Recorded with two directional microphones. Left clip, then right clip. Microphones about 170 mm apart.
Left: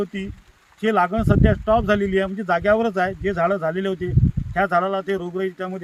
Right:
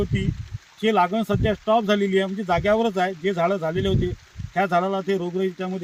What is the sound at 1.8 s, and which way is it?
Speech, 25° left (ahead or behind).